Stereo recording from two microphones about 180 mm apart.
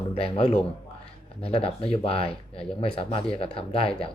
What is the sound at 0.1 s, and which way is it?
A man's voice, 30° left (ahead or behind).